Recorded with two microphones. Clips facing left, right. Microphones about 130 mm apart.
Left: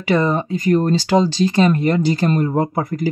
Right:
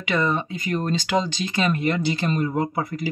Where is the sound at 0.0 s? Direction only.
35° left (ahead or behind).